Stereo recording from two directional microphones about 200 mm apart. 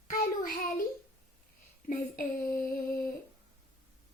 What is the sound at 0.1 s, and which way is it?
Child singing, 45° left (ahead or behind).